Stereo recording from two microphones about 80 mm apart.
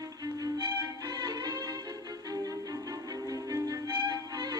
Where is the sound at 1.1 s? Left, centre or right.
Right.